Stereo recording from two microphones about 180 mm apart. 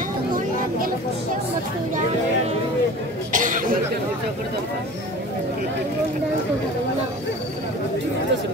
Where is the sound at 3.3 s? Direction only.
45° right (ahead or behind).